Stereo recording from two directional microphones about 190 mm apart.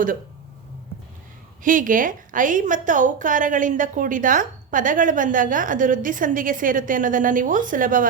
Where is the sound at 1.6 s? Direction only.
45° right (ahead or behind).